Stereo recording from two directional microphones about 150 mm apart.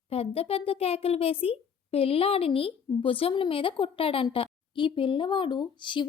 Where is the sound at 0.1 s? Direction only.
40° left (ahead or behind).